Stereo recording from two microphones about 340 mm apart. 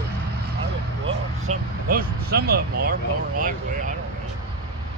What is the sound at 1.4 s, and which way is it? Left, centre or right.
Speech, right.